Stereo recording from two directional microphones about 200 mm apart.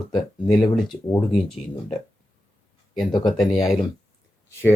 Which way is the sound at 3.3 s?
Centre (ahead or behind).